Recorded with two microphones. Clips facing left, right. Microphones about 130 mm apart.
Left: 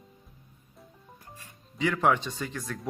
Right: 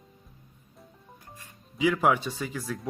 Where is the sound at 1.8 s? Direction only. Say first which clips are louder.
Right 1 dB; 5° right (ahead or behind).